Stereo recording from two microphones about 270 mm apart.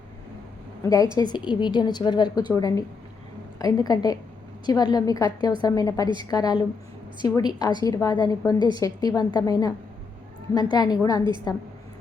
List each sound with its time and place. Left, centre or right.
1.0 s a woman's voice: centre
1.3 s a woman's voice: centre